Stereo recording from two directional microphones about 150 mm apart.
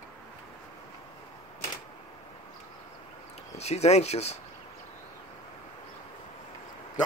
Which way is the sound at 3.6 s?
45° left (ahead or behind).